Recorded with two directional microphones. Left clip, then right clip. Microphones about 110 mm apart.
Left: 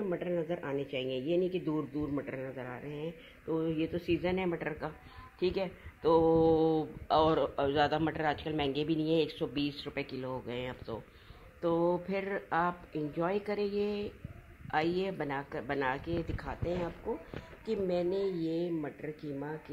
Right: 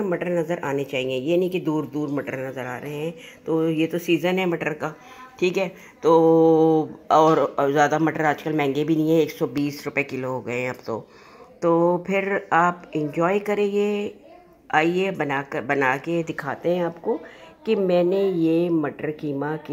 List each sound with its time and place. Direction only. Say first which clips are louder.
0.0 s speech: right 10 dB; centre (ahead or behind)
17.8 s speech: right 12 dB; 15° right (ahead or behind)